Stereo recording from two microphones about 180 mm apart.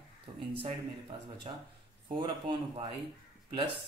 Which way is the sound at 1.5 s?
35° right (ahead or behind).